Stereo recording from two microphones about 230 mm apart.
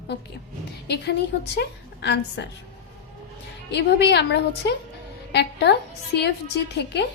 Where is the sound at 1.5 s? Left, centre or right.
Left.